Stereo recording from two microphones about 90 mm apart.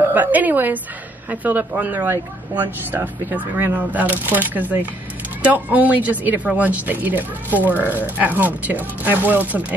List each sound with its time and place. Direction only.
0.1 s speech: 20° right (ahead or behind)